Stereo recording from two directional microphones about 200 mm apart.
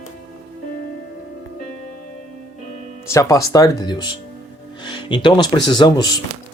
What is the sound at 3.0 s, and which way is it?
Speech, 15° left (ahead or behind).